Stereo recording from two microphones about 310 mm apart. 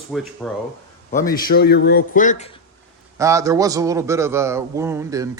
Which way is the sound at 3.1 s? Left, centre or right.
Centre.